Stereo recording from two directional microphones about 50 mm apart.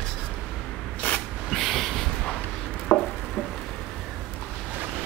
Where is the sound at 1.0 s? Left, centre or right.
Left.